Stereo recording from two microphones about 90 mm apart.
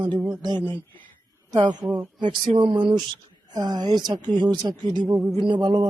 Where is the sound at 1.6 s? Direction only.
55° right (ahead or behind).